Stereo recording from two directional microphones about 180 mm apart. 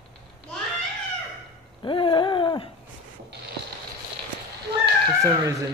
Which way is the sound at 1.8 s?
25° left (ahead or behind).